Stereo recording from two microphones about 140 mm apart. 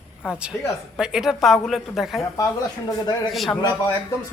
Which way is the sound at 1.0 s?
5° right (ahead or behind).